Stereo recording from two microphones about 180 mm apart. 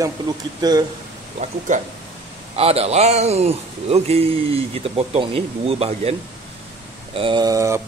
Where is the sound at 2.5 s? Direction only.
35° right (ahead or behind).